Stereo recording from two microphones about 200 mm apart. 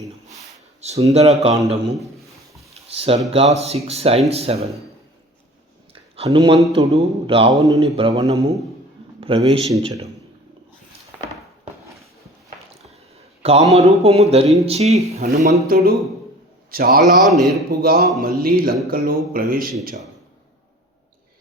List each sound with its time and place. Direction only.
0.8 s speech: 35° right (ahead or behind)
2.9 s speech: 30° right (ahead or behind)
5.9 s a sound: 30° right (ahead or behind)
6.7 s speech: 30° right (ahead or behind)
13.4 s a man's voice: 30° right (ahead or behind); by 17.0 s 50° right (ahead or behind)
17.2 s a man's voice: centre (ahead or behind)
17.7 s speech: 50° right (ahead or behind)